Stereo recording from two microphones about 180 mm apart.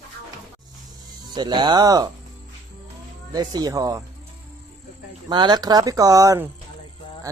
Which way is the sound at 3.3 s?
20° right (ahead or behind).